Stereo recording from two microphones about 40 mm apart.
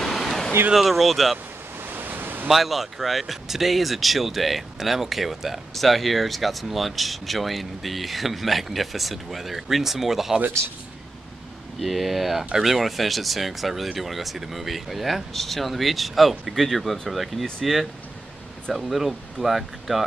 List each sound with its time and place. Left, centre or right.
0.0 s a sound: centre
0.7 s speech: centre
1.9 s a sound: right
2.4 s speech: centre
11.8 s speech: centre
18.7 s speech: centre